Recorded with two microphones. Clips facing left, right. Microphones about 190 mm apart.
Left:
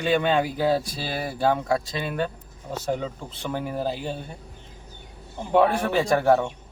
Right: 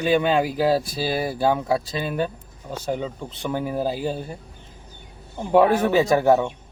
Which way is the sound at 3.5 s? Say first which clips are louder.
Right 3 dB; 5° right (ahead or behind).